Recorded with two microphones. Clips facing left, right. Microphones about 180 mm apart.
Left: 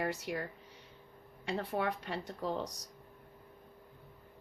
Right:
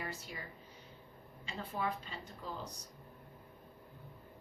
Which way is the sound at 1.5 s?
70° left (ahead or behind).